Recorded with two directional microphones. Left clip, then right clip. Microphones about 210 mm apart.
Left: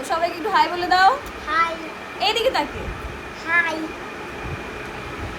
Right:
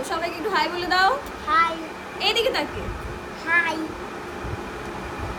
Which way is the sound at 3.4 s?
15° right (ahead or behind).